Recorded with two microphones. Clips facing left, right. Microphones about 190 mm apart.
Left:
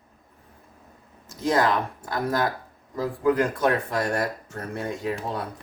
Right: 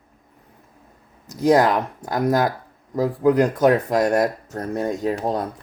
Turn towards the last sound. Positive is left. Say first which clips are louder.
# right 6 dB
turn(degrees=-40)  # may be behind; listen again after turning